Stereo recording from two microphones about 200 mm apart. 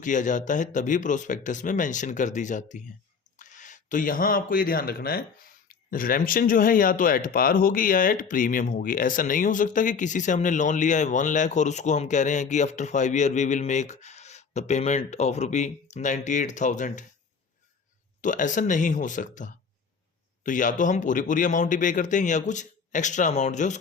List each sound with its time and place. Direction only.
0.0 s speech: 40° left (ahead or behind)
18.2 s speech: 40° left (ahead or behind)